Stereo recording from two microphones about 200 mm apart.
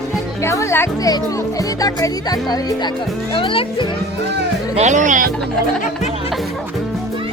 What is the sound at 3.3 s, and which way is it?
Speech, 25° left (ahead or behind).